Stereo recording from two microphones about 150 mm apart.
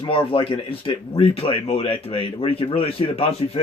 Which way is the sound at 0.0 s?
35° left (ahead or behind).